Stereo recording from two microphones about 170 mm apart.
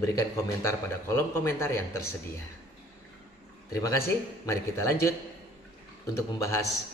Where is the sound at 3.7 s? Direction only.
20° left (ahead or behind).